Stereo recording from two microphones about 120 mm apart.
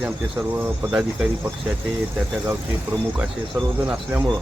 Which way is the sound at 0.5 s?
15° right (ahead or behind).